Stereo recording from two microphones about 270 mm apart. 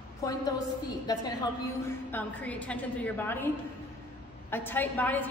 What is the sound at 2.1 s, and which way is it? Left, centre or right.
A woman's voice, centre.